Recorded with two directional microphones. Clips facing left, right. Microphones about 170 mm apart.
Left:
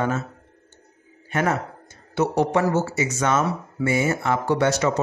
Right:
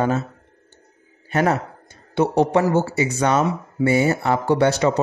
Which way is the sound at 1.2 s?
35° right (ahead or behind).